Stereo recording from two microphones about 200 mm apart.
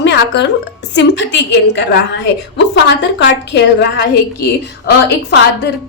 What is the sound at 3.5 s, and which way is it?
A woman's voice, 60° left (ahead or behind).